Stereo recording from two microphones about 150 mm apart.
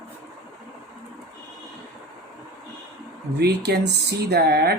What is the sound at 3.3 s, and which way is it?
Speech, 90° right.